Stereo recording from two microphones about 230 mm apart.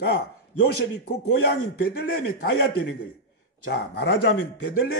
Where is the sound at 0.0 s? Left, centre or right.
Left.